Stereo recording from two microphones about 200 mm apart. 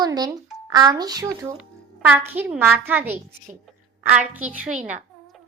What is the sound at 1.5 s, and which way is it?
A child's voice, 10° right (ahead or behind).